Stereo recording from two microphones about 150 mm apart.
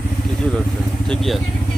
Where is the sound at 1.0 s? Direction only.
5° left (ahead or behind).